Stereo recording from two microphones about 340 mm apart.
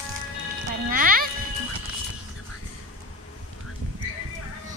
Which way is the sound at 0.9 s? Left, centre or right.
Right.